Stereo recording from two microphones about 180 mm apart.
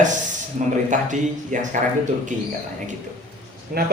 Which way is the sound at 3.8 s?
60° right (ahead or behind).